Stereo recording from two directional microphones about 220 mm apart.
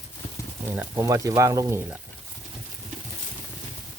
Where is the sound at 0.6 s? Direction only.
10° right (ahead or behind).